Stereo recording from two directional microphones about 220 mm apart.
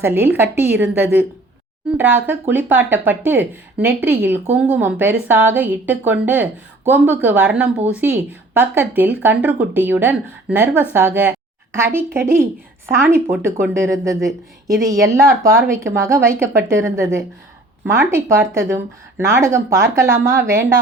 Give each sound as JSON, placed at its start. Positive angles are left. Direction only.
{"t": 0.0, "sound": "speech", "side_deg": -10}